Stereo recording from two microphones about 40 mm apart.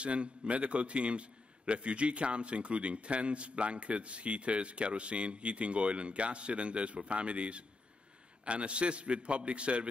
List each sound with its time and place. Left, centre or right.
0.0 s a man's voice: right